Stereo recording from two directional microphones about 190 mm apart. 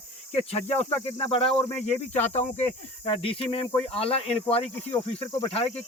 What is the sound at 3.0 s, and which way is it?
Speech, 30° left (ahead or behind).